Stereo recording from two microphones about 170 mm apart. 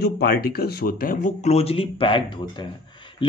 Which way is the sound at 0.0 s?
65° left (ahead or behind).